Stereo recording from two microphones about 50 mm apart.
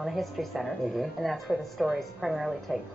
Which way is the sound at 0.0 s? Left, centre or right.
Centre.